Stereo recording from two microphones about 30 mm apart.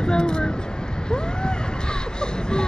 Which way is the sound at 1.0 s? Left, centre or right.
Left.